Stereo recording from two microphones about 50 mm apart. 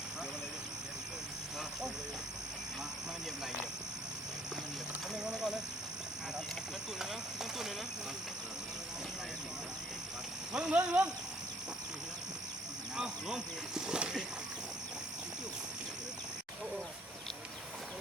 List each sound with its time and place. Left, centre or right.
5.2 s a sound: centre
10.5 s speech: right
13.0 s speech: centre